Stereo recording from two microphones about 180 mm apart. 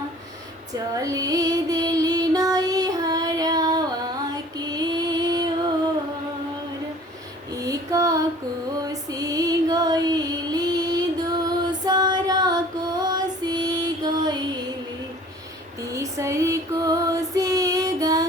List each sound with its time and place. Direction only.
0.7 s female singing: 20° right (ahead or behind)
7.5 s female singing: 20° right (ahead or behind)
15.9 s female singing: 15° right (ahead or behind)